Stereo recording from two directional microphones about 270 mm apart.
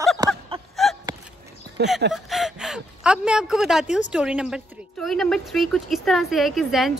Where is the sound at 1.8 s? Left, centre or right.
Right.